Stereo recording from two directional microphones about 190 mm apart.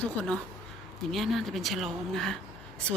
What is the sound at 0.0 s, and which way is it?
Speech, 5° left (ahead or behind).